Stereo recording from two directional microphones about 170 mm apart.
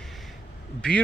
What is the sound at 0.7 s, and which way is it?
Speech, 5° left (ahead or behind).